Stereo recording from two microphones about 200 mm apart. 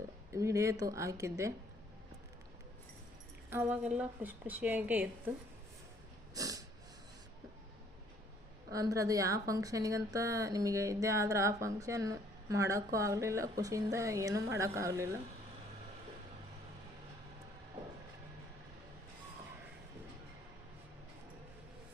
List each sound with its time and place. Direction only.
0.3 s a woman's voice: 15° right (ahead or behind)
3.5 s a woman's voice: 10° right (ahead or behind)
6.3 s snort: 15° right (ahead or behind)
8.7 s a woman's voice: 15° right (ahead or behind)